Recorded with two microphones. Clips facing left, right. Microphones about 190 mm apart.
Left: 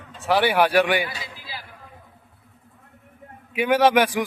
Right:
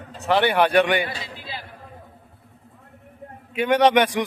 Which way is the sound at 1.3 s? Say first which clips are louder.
Right 3 dB; 25° right (ahead or behind).